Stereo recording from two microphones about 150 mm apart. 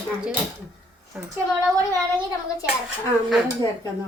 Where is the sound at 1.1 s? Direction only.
10° right (ahead or behind).